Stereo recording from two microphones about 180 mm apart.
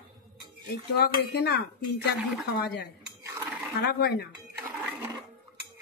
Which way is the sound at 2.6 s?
65° left (ahead or behind).